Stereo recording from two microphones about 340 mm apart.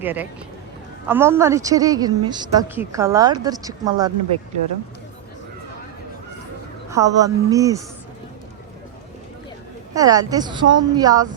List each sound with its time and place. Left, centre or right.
0.0 s a woman's voice: centre
6.9 s a woman's voice: centre
9.9 s a woman's voice: centre